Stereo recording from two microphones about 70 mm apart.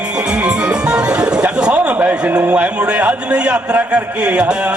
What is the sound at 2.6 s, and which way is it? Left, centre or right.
Speech, centre.